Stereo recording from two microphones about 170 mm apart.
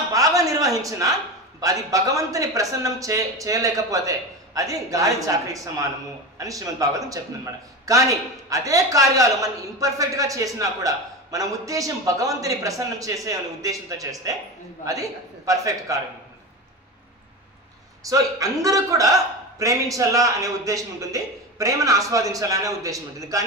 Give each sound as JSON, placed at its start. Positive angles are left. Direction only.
{"t": 0.1, "sound": "a sound", "side_deg": -20}
{"t": 1.9, "sound": "a man's voice", "side_deg": -20}
{"t": 18.0, "sound": "a man's voice", "side_deg": -20}